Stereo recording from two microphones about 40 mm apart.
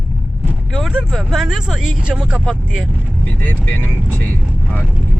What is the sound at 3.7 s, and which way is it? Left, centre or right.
Speech, left.